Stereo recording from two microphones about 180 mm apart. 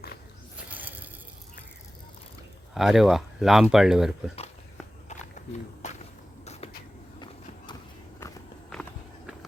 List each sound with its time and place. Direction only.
0.7 s a sound: 10° right (ahead or behind)
2.7 s speech: centre (ahead or behind)
5.0 s walk: 40° left (ahead or behind)
5.8 s a sound: 35° left (ahead or behind)
8.2 s walk: 15° left (ahead or behind)
8.7 s walk: centre (ahead or behind)